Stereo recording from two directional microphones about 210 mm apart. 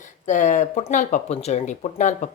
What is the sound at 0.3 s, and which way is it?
Speech, 35° left (ahead or behind).